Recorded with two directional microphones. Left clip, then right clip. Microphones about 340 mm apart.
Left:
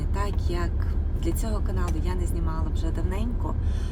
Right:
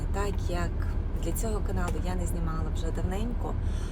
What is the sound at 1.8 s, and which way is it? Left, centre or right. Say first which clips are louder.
Speech: left 1 dB; centre.